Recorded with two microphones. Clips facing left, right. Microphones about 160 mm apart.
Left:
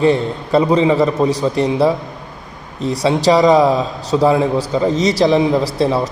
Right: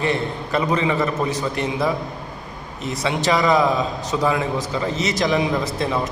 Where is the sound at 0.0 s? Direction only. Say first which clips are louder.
Left 8 dB; 30° left (ahead or behind).